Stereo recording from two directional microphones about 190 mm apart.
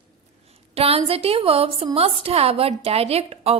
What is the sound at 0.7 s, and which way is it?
A woman's voice, 30° right (ahead or behind).